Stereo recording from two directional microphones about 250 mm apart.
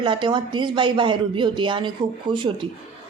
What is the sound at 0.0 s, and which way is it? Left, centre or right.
Speech, centre.